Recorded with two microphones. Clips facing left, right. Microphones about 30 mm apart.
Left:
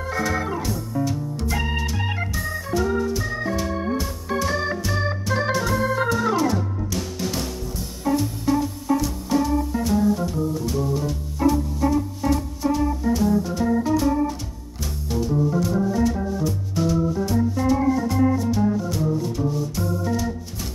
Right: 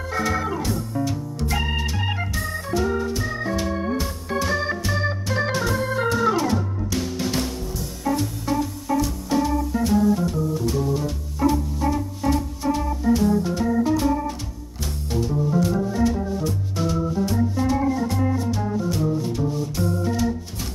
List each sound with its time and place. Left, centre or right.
0.2 s music: centre
1.5 s organ: centre
6.0 s music: centre
8.0 s music: centre
9.0 s organ: centre
14.8 s music: centre